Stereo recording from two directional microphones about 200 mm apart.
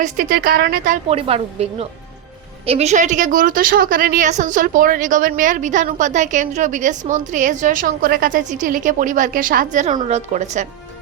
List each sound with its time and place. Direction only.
0.0 s a woman's voice: 45° right (ahead or behind)
1.0 s a woman's voice: 30° right (ahead or behind)